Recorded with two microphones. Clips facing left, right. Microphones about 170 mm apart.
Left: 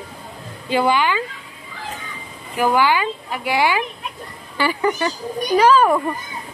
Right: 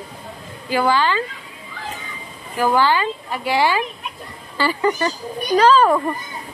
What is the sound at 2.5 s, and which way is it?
Speech, 15° left (ahead or behind).